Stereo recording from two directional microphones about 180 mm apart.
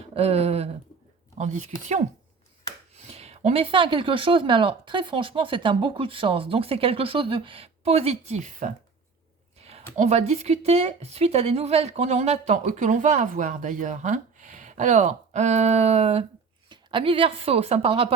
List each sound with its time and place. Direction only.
0.1 s speech: 35° right (ahead or behind)
2.9 s speech: 35° right (ahead or behind)